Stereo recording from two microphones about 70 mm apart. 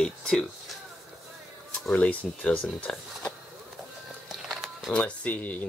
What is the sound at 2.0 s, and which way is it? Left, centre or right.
Speech, left.